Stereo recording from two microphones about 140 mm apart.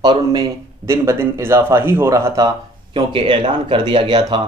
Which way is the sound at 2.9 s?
40° right (ahead or behind).